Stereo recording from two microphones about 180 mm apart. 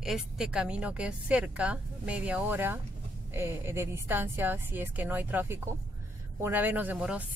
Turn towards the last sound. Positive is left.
turn(degrees=-10)  # may be behind; listen again after turning